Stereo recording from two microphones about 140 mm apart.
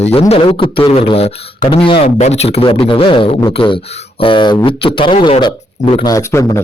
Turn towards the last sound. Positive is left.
turn(degrees=20)  # may be behind; listen again after turning